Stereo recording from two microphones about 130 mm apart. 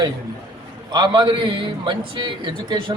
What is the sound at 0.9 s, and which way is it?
A man's voice, 35° right (ahead or behind).